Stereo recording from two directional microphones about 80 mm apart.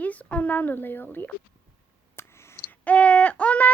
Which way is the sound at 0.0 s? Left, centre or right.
Centre.